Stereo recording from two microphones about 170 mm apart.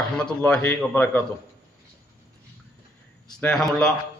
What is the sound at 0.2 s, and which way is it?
A man's voice, 5° left (ahead or behind).